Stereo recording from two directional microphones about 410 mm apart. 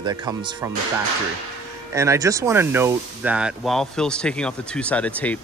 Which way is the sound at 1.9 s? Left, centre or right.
Centre.